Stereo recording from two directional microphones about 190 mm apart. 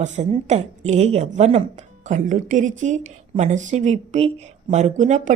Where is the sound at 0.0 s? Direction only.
40° right (ahead or behind).